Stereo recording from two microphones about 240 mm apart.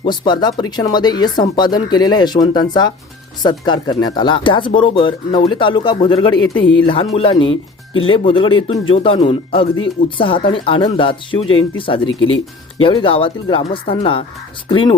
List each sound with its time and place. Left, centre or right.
0.0 s speech: centre
7.5 s speech: left
8.1 s speech: left